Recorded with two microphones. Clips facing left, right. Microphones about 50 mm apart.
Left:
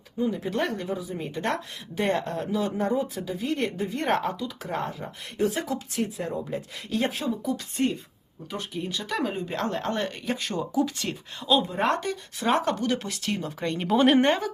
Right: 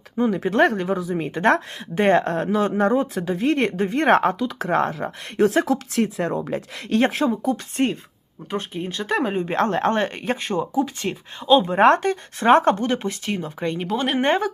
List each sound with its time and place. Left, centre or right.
0.2 s speech: right
0.5 s speech: right
2.9 s speech: right
11.7 s speech: right
13.0 s speech: right
13.8 s speech: centre